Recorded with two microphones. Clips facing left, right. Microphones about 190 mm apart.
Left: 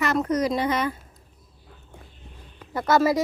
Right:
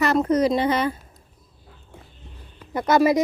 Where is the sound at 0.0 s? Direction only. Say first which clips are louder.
Right 4 dB; 30° right (ahead or behind).